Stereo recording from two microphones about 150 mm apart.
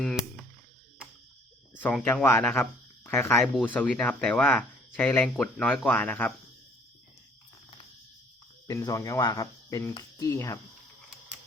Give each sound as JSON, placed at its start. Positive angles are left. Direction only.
{"t": 1.7, "sound": "speech", "side_deg": 10}
{"t": 2.2, "sound": "speech", "side_deg": 15}
{"t": 8.6, "sound": "speech", "side_deg": 25}